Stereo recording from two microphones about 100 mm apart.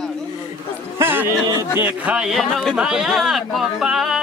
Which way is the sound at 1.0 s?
20° right (ahead or behind).